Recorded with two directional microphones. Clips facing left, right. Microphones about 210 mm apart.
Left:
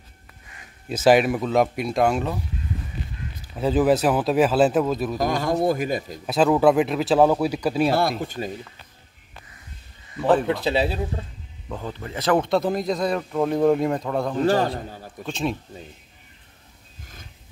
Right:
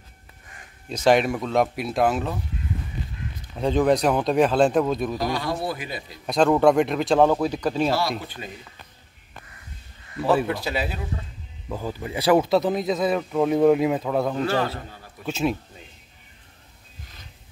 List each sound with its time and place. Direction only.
0.8 s speech: 5° left (ahead or behind)
3.5 s speech: 5° left (ahead or behind)
5.1 s a man's voice: 45° left (ahead or behind)
6.2 s speech: 5° left (ahead or behind)
8.2 s a man's voice: 45° left (ahead or behind)
10.4 s speech: 20° left (ahead or behind)
11.7 s speech: 5° right (ahead or behind)
14.4 s a man's voice: 40° left (ahead or behind)
15.2 s speech: 5° right (ahead or behind)